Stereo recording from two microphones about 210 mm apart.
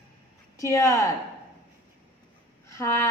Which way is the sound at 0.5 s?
15° left (ahead or behind).